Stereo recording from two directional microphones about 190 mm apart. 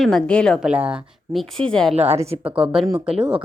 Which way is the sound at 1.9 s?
35° right (ahead or behind).